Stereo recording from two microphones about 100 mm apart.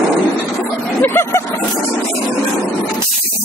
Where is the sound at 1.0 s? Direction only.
25° left (ahead or behind).